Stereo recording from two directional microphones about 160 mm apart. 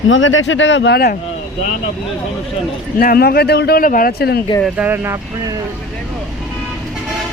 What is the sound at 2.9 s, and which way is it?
A man's voice, 65° left (ahead or behind).